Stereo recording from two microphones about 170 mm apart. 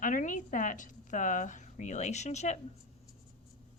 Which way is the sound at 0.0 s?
50° left (ahead or behind).